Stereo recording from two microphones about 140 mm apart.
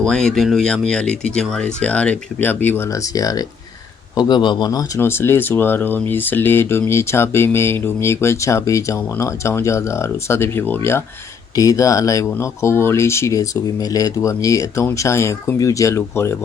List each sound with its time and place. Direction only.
0.0 s speech: 5° left (ahead or behind); by 4.9 s 30° left (ahead or behind)
4.9 s speech: 15° left (ahead or behind)